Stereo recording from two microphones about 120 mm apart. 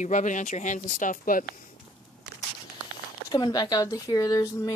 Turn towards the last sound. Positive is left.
turn(degrees=30)  # may be behind; listen again after turning